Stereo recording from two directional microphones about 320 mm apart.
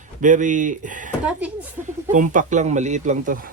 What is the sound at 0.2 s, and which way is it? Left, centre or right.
Speech, right.